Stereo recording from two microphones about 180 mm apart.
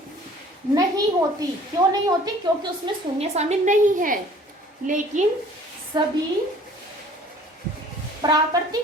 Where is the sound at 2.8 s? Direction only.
35° right (ahead or behind).